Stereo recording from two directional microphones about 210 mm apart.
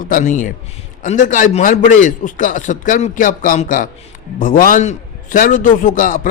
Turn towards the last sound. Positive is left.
turn(degrees=40)  # may be behind; listen again after turning